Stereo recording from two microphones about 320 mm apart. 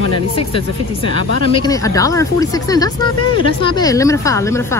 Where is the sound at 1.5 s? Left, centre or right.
Centre.